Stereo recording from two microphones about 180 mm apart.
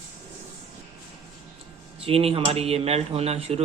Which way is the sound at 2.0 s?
35° right (ahead or behind).